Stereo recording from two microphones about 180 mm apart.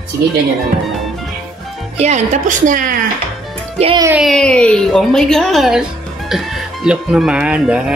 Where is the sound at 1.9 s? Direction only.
40° right (ahead or behind).